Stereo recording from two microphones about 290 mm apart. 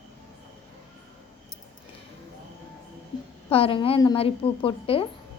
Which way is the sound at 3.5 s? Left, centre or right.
Centre.